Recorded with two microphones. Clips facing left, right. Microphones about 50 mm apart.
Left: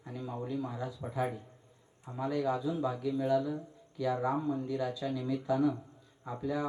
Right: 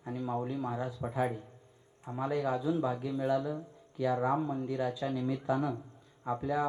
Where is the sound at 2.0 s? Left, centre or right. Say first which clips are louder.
Even; right.